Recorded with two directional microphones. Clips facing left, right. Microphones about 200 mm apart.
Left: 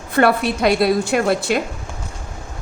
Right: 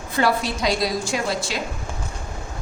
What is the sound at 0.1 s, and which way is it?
A woman's voice, 60° left (ahead or behind).